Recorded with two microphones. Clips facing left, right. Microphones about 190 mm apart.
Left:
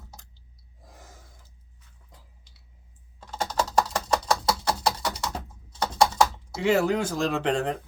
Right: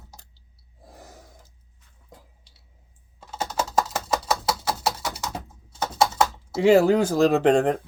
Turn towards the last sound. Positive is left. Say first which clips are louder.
# right 7 dB
turn(degrees=-50)  # may be behind; listen again after turning